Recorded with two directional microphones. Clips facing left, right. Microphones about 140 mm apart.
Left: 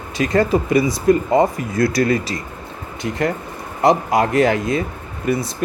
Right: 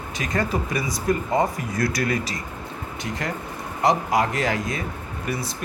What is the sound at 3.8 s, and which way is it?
Speech, 25° left (ahead or behind).